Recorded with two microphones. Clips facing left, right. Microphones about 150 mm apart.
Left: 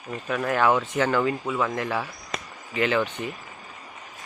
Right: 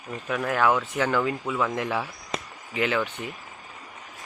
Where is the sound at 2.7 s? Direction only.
10° right (ahead or behind).